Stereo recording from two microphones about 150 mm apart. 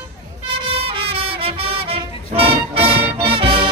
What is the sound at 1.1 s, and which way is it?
Music, 40° right (ahead or behind).